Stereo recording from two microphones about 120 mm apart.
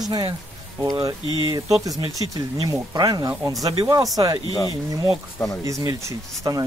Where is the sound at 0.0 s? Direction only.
35° right (ahead or behind).